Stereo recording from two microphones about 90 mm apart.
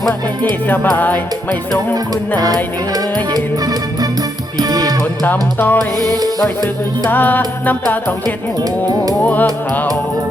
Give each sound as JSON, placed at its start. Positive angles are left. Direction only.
{"t": 0.9, "sound": "music", "side_deg": 20}
{"t": 2.9, "sound": "music", "side_deg": -45}
{"t": 5.2, "sound": "music", "side_deg": 20}
{"t": 6.0, "sound": "music", "side_deg": -45}
{"t": 7.1, "sound": "music", "side_deg": 20}
{"t": 9.2, "sound": "music", "side_deg": 15}